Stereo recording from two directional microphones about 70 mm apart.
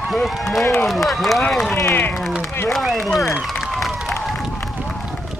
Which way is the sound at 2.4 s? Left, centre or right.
Left.